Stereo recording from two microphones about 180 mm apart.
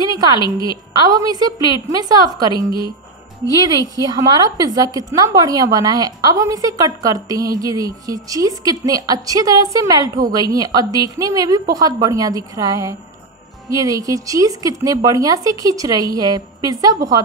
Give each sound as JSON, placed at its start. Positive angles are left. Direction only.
{"t": 0.0, "sound": "a sound", "side_deg": -20}
{"t": 1.0, "sound": "a woman's voice", "side_deg": -20}
{"t": 3.8, "sound": "a woman's voice", "side_deg": -20}